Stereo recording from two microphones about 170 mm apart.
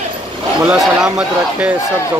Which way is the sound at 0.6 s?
5° right (ahead or behind).